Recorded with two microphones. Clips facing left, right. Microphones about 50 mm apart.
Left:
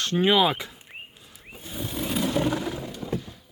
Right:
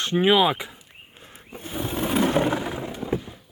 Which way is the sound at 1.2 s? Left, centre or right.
Right.